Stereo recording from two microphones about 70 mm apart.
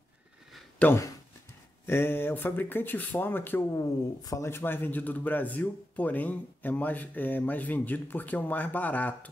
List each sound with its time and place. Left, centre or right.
0.8 s speech: centre
1.9 s speech: left
3.7 s speech: left
4.5 s speech: left